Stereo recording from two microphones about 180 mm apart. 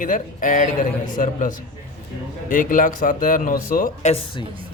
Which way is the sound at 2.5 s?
50° left (ahead or behind).